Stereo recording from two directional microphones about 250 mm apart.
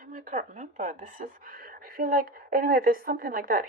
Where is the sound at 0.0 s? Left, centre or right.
Right.